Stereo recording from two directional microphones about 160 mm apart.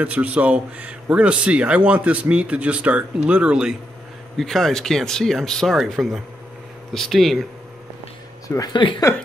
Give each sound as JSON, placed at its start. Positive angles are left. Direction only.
{"t": 0.0, "sound": "speech", "side_deg": -10}
{"t": 8.5, "sound": "speech", "side_deg": 25}